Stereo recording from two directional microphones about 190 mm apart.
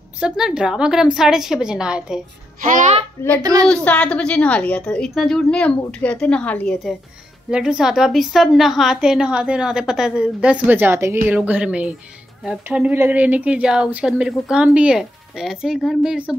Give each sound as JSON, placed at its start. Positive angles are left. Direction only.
{"t": 0.2, "sound": "speech", "side_deg": -5}
{"t": 2.7, "sound": "a sound", "side_deg": -35}
{"t": 3.6, "sound": "a woman's voice", "side_deg": 5}